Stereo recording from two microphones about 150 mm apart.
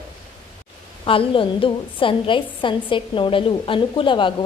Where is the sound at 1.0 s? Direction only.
35° left (ahead or behind).